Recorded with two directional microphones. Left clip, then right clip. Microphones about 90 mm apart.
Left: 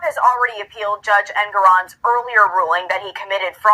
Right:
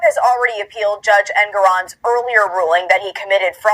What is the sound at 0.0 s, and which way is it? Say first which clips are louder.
Speech: right 3 dB; 25° right (ahead or behind).